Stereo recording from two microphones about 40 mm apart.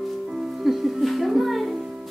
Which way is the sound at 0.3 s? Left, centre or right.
Centre.